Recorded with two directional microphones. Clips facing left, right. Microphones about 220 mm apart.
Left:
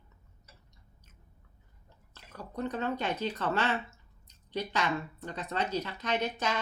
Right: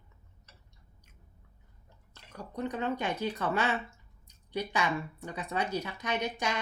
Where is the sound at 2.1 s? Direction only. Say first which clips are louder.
Even; 15° right (ahead or behind).